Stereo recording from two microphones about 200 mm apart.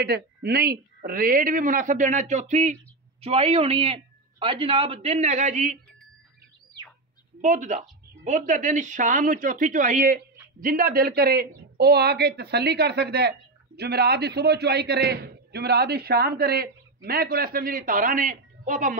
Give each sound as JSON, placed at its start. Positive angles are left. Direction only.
{"t": 0.0, "sound": "speech", "side_deg": -55}
{"t": 7.4, "sound": "a man's voice", "side_deg": -40}